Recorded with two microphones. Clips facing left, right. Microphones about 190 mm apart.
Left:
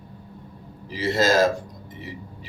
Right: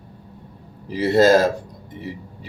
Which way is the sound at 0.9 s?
60° right (ahead or behind).